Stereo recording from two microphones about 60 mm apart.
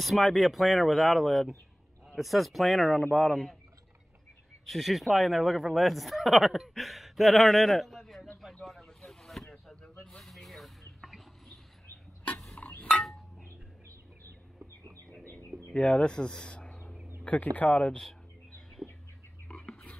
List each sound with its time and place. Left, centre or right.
0.0 s speech: centre
4.6 s speech: centre
8.6 s vehicle: centre
12.5 s chink: left
15.7 s speech: centre
18.8 s bird: centre
19.4 s whispering: centre